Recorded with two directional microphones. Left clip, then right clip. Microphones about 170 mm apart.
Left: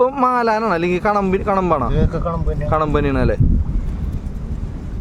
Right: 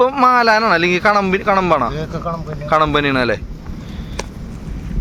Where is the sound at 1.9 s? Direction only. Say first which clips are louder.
Left 2 dB; 35° left (ahead or behind).